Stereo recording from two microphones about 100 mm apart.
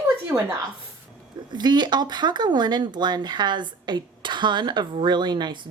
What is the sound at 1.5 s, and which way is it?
Speech, 45° right (ahead or behind).